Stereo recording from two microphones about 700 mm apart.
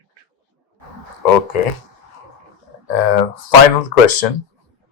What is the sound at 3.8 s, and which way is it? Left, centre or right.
Speech, left.